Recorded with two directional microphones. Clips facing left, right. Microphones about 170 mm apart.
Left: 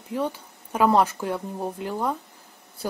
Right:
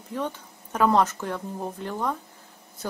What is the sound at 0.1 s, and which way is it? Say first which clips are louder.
Speech: left 3 dB; 10° left (ahead or behind).